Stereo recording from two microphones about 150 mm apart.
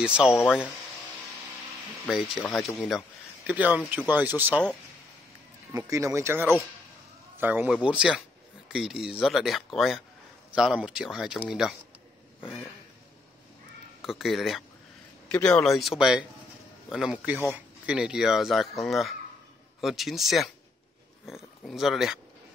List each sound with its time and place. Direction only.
0.0 s speech: 5° right (ahead or behind)
2.0 s speech: centre (ahead or behind)
3.4 s speech: 10° right (ahead or behind)
5.7 s speech: 20° right (ahead or behind); by 11.7 s 5° right (ahead or behind)
14.0 s speech: centre (ahead or behind)